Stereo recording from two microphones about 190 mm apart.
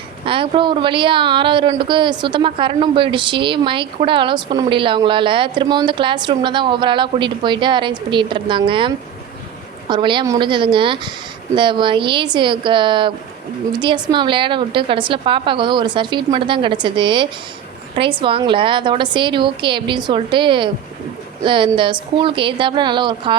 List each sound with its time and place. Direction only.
0.3 s a woman's voice: 25° right (ahead or behind)
9.9 s a woman's voice: 25° right (ahead or behind)